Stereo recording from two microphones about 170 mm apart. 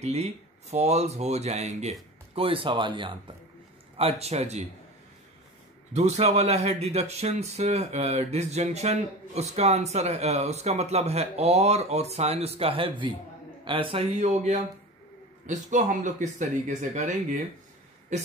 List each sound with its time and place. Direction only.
0.0 s speech: 40° right (ahead or behind)
5.9 s speech: 40° right (ahead or behind)